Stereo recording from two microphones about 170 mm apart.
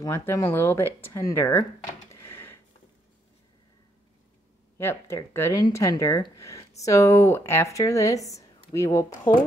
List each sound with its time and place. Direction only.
0.0 s speech: 15° left (ahead or behind)
2.1 s a sound: 15° left (ahead or behind)
4.7 s speech: 15° left (ahead or behind)